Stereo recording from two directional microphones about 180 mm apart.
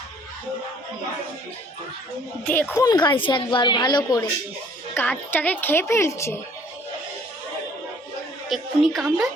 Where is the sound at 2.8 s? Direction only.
25° left (ahead or behind).